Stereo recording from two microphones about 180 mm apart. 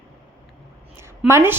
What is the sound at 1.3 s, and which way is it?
Speech, 15° right (ahead or behind).